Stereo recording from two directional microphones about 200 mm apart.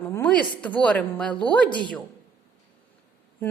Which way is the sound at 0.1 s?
10° left (ahead or behind).